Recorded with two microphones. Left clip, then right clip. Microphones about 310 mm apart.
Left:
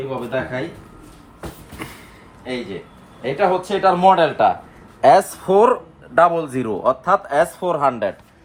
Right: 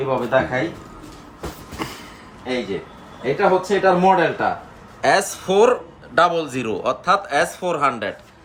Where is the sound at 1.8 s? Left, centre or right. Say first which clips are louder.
Right 4 dB; centre.